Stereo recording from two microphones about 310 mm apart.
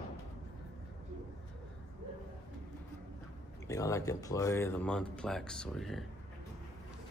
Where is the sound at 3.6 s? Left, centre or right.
Centre.